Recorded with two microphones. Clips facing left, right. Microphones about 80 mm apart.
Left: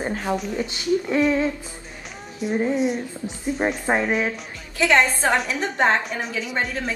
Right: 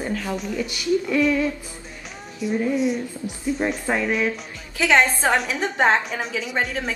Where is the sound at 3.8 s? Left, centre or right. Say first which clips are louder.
Left 1 dB; left.